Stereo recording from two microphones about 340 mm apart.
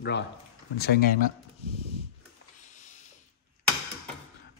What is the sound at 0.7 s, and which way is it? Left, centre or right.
Speech, left.